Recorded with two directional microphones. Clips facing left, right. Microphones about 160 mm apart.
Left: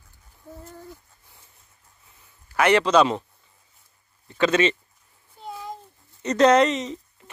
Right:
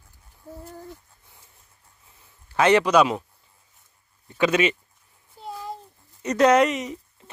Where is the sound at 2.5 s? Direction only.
20° right (ahead or behind).